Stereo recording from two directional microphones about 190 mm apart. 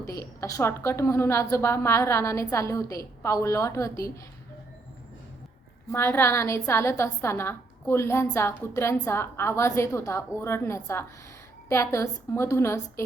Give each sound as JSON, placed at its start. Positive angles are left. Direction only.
{"t": 0.0, "sound": "a woman's voice", "side_deg": 15}
{"t": 5.9, "sound": "a woman's voice", "side_deg": 15}